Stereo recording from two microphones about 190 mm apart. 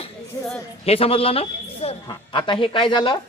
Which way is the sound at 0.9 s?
30° left (ahead or behind).